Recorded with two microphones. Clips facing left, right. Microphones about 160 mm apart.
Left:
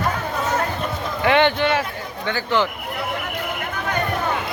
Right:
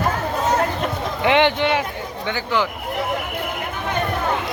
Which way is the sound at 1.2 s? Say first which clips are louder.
Even; 20° right (ahead or behind).